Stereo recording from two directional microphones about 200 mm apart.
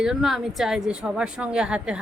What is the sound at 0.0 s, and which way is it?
A woman's voice, centre (ahead or behind).